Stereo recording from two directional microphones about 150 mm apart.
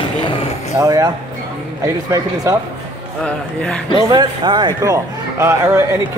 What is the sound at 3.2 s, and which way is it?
Speech, 5° left (ahead or behind).